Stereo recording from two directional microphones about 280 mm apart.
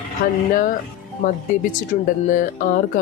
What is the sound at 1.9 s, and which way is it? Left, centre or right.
Speech, left.